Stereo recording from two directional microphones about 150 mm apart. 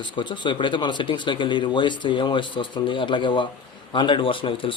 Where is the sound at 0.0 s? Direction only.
30° left (ahead or behind).